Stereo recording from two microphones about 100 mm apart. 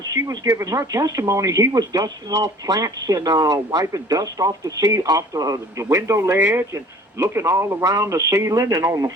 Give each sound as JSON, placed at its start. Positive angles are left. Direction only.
{"t": 0.1, "sound": "speech", "side_deg": -35}